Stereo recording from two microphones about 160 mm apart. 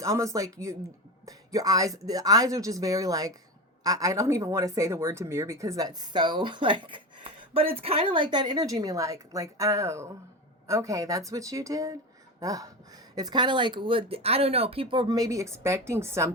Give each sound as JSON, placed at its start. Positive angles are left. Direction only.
{"t": 0.0, "sound": "speech", "side_deg": -20}